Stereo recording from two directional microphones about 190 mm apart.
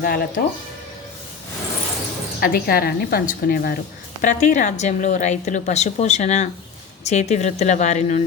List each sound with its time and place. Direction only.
0.0 s a woman's voice: 50° left (ahead or behind)
2.4 s a woman's voice: 55° left (ahead or behind)
4.2 s a woman's voice: 40° left (ahead or behind)